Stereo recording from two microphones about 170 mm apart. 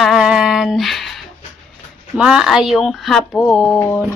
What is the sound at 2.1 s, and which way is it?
Speech, 5° right (ahead or behind).